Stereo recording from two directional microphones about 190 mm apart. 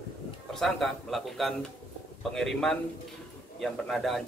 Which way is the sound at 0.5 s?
Centre (ahead or behind).